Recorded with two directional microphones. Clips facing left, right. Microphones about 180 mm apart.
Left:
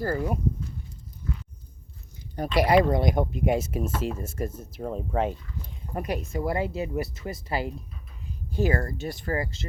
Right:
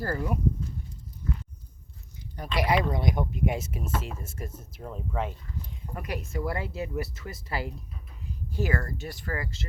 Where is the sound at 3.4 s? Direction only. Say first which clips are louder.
Left 5 dB; 35° left (ahead or behind).